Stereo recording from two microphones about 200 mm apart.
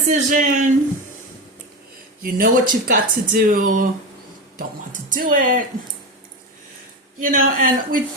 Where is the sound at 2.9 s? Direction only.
45° right (ahead or behind).